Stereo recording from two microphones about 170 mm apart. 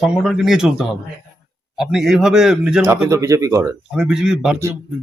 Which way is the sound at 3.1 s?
15° right (ahead or behind).